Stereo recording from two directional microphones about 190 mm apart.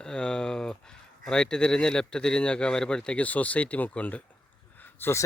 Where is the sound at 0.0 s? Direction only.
5° left (ahead or behind).